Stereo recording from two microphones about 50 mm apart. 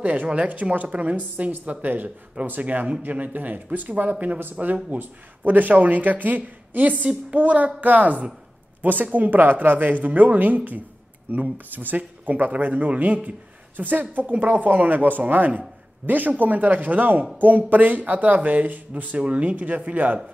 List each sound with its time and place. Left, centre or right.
0.0 s speech: right